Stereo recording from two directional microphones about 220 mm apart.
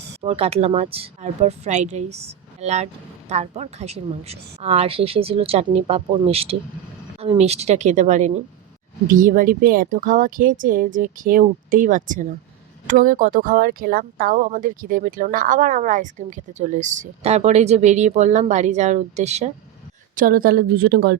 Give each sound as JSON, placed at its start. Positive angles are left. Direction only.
{"t": 0.2, "sound": "a woman's voice", "side_deg": -25}